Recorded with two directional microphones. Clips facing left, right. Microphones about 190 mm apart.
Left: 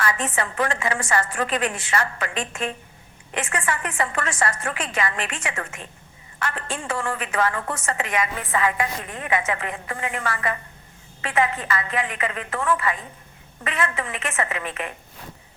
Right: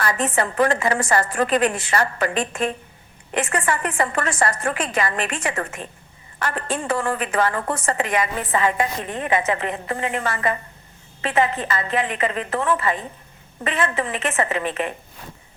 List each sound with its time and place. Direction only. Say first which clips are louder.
0.0 s a woman's voice: right 3 dB; 35° right (ahead or behind)